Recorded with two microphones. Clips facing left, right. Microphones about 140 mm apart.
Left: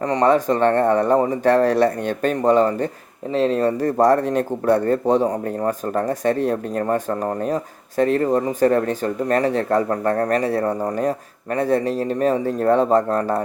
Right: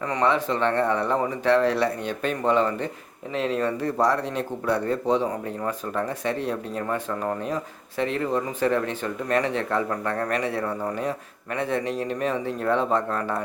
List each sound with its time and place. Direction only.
0.0 s speech: 40° left (ahead or behind)